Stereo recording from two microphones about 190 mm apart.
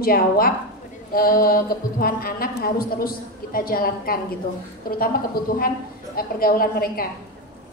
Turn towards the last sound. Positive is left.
turn(degrees=50)  # may be behind; listen again after turning